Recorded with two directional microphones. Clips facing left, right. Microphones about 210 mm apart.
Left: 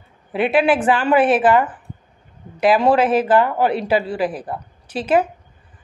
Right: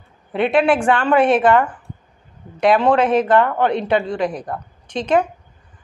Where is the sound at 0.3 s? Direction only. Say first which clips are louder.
Right 1 dB; 5° left (ahead or behind).